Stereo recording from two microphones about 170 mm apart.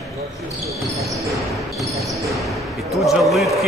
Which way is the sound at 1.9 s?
Centre (ahead or behind).